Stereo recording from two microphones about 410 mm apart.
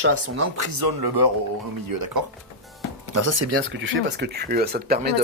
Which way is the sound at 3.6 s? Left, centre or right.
Right.